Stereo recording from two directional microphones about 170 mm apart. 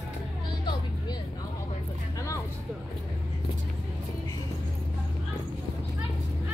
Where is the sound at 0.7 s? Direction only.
25° left (ahead or behind).